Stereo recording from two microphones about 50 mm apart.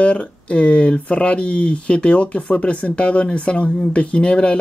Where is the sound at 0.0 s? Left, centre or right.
Left.